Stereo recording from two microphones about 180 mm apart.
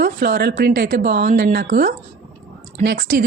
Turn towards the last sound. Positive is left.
turn(degrees=-55)  # may be behind; listen again after turning